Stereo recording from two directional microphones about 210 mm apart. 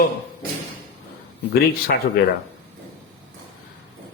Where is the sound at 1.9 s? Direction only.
50° left (ahead or behind).